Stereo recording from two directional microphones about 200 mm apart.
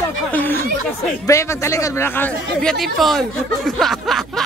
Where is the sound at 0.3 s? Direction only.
10° left (ahead or behind).